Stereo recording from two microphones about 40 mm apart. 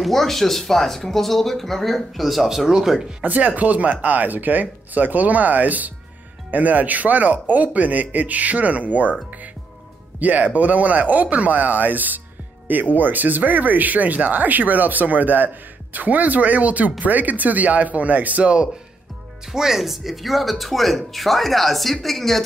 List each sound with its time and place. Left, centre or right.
0.0 s speech: centre
3.2 s speech: right
10.1 s speech: right
19.5 s speech: centre